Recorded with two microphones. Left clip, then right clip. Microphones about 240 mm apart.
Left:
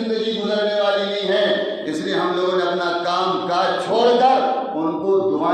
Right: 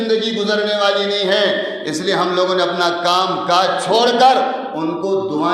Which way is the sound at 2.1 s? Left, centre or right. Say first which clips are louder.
Right 4 dB; right.